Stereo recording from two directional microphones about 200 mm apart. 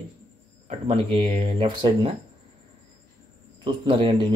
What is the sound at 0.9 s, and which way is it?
Speech, 25° right (ahead or behind).